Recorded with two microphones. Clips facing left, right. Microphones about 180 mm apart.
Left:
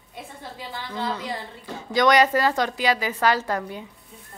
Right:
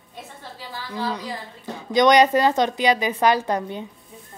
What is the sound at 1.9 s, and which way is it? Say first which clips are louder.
A woman's voice: right 3 dB; 20° right (ahead or behind).